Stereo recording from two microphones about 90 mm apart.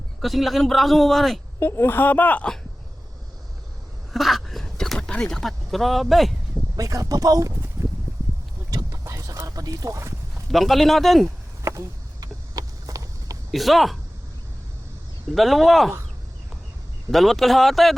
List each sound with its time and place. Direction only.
0.2 s a man's voice: centre (ahead or behind)
1.5 s speech: 30° left (ahead or behind)
4.1 s a sound: centre (ahead or behind)
6.7 s speech: 40° right (ahead or behind)
7.8 s a sound: 25° right (ahead or behind)
8.7 s a sound: 35° right (ahead or behind)
10.5 s a man's voice: centre (ahead or behind)
11.6 s vehicle: 35° right (ahead or behind)
13.5 s a man's voice: centre (ahead or behind)
15.4 s a man's voice: centre (ahead or behind)
17.1 s a man's voice: centre (ahead or behind)